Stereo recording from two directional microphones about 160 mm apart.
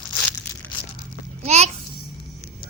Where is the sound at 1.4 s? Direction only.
45° right (ahead or behind).